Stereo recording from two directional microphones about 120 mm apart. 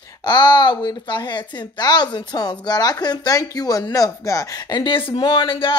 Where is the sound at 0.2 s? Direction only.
40° left (ahead or behind).